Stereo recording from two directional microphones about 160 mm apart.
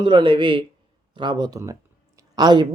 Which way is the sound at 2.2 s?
25° right (ahead or behind).